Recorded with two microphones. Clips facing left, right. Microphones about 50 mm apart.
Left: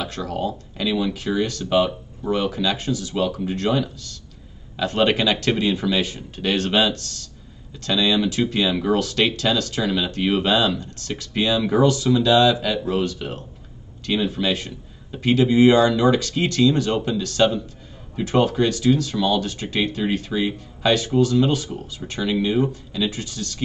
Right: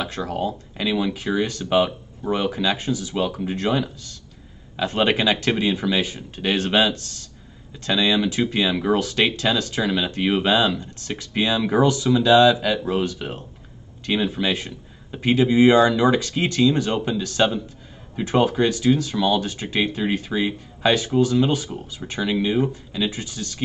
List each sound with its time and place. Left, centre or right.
0.0 s speech: centre